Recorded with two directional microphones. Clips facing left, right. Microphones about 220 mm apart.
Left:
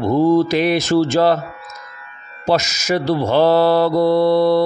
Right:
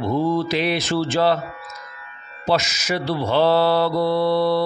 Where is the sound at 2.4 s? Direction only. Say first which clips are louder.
Left 4 dB; 45° left (ahead or behind).